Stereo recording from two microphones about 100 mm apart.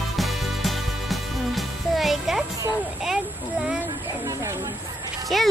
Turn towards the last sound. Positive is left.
turn(degrees=0)  # may be behind; listen again after turning